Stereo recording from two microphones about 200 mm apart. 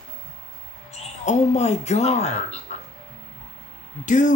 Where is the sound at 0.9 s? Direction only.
35° left (ahead or behind).